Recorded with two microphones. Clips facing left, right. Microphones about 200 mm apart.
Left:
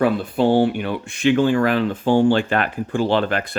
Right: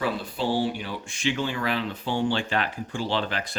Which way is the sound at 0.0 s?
55° left (ahead or behind).